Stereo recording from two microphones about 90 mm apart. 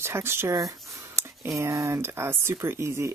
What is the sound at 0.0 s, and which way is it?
Speech, 30° right (ahead or behind).